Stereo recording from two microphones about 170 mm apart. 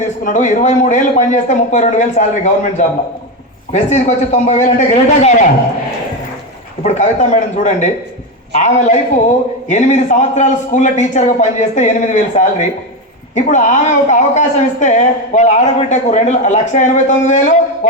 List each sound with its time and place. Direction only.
0.3 s speech: 45° left (ahead or behind)
6.8 s speech: 40° left (ahead or behind)